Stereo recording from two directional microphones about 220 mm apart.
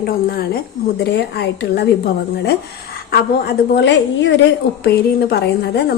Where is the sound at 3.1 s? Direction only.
50° left (ahead or behind).